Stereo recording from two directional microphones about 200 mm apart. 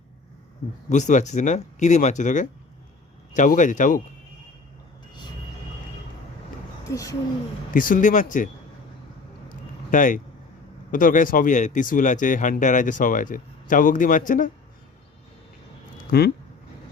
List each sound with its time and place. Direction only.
0.9 s speech: 35° left (ahead or behind)
6.9 s speech: 15° left (ahead or behind)
7.7 s speech: 45° left (ahead or behind)
9.5 s a sound: 40° left (ahead or behind)
10.9 s speech: 40° left (ahead or behind)
16.0 s speech: 50° left (ahead or behind)